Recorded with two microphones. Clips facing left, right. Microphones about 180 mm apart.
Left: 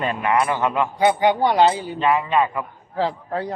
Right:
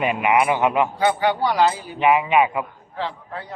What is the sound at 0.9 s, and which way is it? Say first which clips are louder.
Speech: left 2 dB; 20° left (ahead or behind).